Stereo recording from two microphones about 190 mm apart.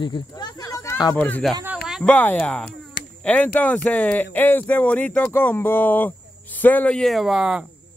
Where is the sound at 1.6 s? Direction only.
5° right (ahead or behind).